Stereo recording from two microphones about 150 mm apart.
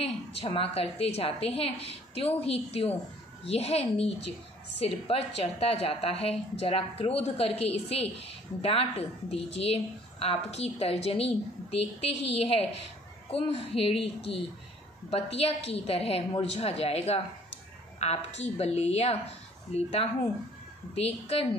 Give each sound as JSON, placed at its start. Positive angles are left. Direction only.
{"t": 0.0, "sound": "a woman's voice", "side_deg": 40}
{"t": 12.4, "sound": "a woman's voice", "side_deg": 40}